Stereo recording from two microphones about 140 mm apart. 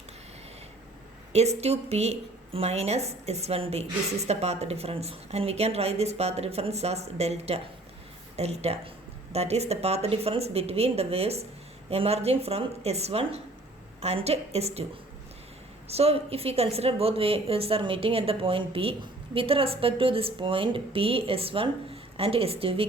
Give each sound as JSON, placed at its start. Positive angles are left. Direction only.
{"t": 1.3, "sound": "a woman's voice", "side_deg": -50}
{"t": 15.9, "sound": "a woman's voice", "side_deg": -45}